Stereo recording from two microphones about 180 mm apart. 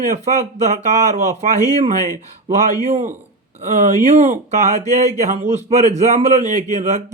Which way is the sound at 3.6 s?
40° right (ahead or behind).